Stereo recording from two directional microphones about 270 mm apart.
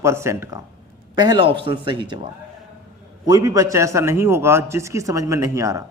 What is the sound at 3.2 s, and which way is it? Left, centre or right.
A man's voice, centre.